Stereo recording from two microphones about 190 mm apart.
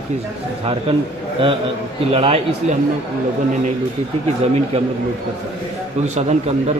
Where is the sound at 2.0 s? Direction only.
30° right (ahead or behind).